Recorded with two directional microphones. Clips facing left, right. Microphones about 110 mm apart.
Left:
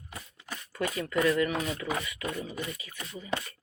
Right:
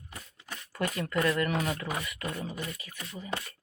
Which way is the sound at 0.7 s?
55° right (ahead or behind).